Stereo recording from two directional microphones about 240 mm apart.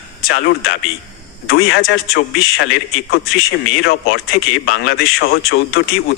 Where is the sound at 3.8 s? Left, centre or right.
Left.